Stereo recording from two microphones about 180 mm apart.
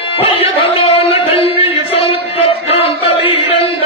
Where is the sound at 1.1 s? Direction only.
30° left (ahead or behind).